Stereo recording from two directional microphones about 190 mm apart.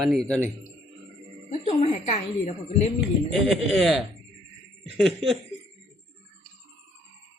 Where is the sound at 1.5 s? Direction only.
35° left (ahead or behind).